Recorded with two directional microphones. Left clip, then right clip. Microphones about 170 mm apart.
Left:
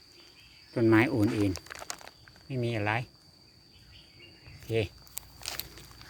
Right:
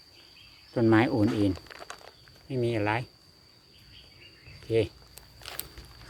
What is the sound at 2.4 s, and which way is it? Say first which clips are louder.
Speech: right 3 dB; 10° right (ahead or behind).